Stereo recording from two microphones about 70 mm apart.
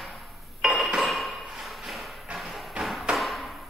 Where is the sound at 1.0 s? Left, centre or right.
Centre.